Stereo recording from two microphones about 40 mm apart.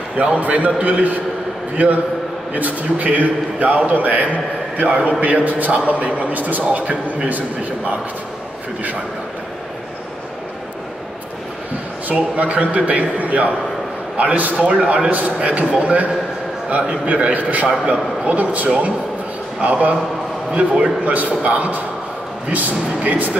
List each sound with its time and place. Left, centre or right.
0.2 s a man's voice: right
2.5 s a man's voice: right
6.6 s a man's voice: right
12.1 s a man's voice: right
14.7 s a man's voice: right
17.3 s a man's voice: right